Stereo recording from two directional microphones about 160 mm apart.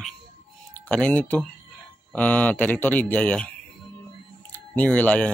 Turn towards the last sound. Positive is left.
turn(degrees=10)  # may be behind; listen again after turning